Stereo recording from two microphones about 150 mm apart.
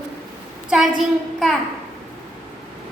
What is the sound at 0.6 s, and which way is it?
Speech, 5° right (ahead or behind).